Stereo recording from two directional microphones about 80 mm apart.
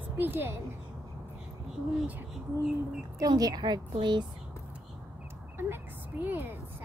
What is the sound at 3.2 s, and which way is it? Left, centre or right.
A woman's voice, right.